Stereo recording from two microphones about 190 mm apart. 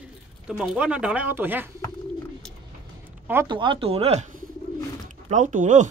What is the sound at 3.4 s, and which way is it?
Speech, 25° right (ahead or behind).